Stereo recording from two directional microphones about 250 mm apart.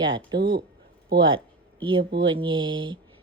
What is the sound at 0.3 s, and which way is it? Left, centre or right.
Speech, right.